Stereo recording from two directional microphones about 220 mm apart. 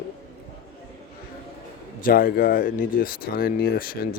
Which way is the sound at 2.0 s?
40° left (ahead or behind).